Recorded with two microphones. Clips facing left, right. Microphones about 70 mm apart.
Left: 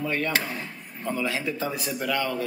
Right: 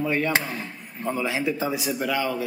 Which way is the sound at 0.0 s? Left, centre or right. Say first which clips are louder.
Right 3 dB; centre.